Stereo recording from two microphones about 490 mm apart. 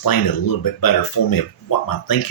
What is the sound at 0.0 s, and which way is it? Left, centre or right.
Speech, left.